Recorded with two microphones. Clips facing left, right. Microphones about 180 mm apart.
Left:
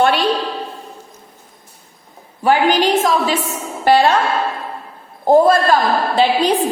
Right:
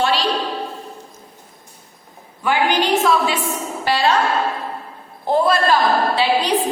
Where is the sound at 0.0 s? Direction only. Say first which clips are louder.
Left 4 dB; 55° left (ahead or behind).